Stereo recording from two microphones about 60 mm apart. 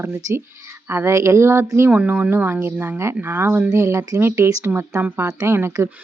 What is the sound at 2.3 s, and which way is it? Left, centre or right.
A woman's voice, right.